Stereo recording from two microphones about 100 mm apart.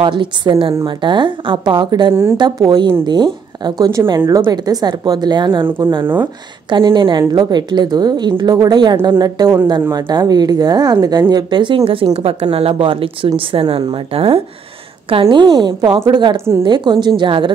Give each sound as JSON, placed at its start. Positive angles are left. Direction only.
{"t": 0.0, "sound": "a woman's voice", "side_deg": -55}
{"t": 11.8, "sound": "speech", "side_deg": -65}
{"t": 12.5, "sound": "a woman's voice", "side_deg": -65}
{"t": 15.3, "sound": "a woman's voice", "side_deg": -50}
{"t": 16.3, "sound": "a woman's voice", "side_deg": -25}
{"t": 16.6, "sound": "a woman's voice", "side_deg": -50}